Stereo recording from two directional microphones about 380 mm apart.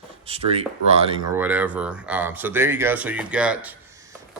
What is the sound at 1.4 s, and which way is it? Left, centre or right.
Speech, centre.